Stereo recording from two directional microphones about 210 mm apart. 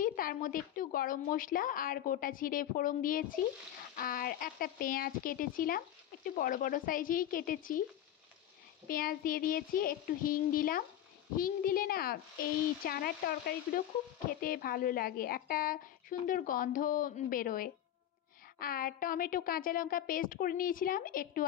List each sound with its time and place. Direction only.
0.0 s a woman's voice: 40° left (ahead or behind)
3.9 s child singing: 45° left (ahead or behind)
6.2 s a woman's voice: 40° left (ahead or behind)
8.8 s child singing: 45° left (ahead or behind)
14.4 s a woman's voice: 45° left (ahead or behind)